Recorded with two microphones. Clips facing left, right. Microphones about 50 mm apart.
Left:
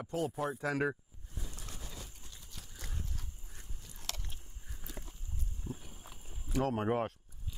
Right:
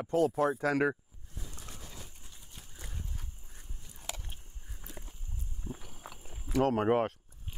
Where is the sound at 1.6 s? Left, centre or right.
Right.